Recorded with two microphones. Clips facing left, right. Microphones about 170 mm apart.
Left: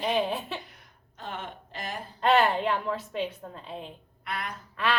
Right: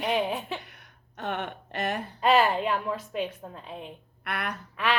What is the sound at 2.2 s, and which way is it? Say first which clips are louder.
A woman's voice: even; 5° right (ahead or behind).